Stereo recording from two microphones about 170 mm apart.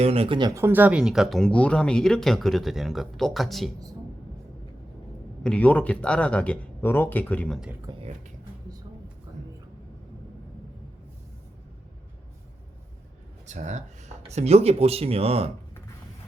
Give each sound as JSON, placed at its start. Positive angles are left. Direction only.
{"t": 0.0, "sound": "speech", "side_deg": -35}
{"t": 0.6, "sound": "speech", "side_deg": -10}
{"t": 5.4, "sound": "speech", "side_deg": 5}
{"t": 7.9, "sound": "speech", "side_deg": -25}
{"t": 13.5, "sound": "speech", "side_deg": -45}